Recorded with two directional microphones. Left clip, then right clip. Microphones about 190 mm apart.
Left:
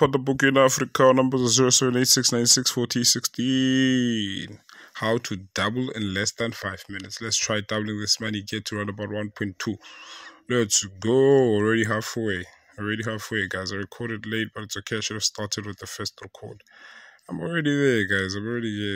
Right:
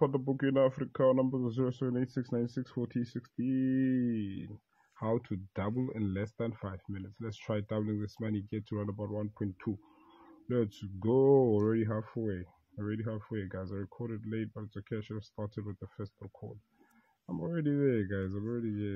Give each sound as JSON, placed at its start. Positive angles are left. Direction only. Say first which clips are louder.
{"t": 0.0, "sound": "speech", "louder": "left 11 dB", "side_deg": 35}
{"t": 5.2, "sound": "speech", "louder": "left 12 dB", "side_deg": 15}
{"t": 10.5, "sound": "speech", "louder": "left 11 dB", "side_deg": 20}
{"t": 11.9, "sound": "speech", "louder": "left 11 dB", "side_deg": 40}
{"t": 17.3, "sound": "speech", "louder": "left 8 dB", "side_deg": 40}
{"t": 17.6, "sound": "speech", "louder": "left 10 dB", "side_deg": 25}